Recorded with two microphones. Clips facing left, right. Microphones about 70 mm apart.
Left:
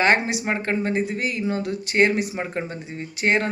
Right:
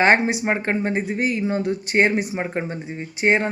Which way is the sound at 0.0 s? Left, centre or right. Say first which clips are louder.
Right 3 dB; right.